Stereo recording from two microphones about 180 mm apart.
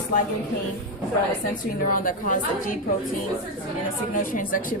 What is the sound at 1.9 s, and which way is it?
Speech, 50° left (ahead or behind).